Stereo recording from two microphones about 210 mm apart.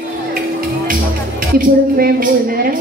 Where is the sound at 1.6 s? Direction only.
45° right (ahead or behind).